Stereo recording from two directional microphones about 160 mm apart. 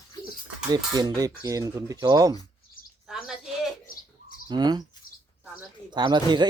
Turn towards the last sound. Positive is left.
turn(degrees=-30)  # may be behind; listen again after turning